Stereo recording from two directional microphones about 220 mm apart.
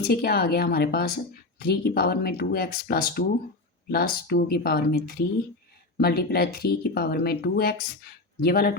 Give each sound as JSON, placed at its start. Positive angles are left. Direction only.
{"t": 0.1, "sound": "speech", "side_deg": 45}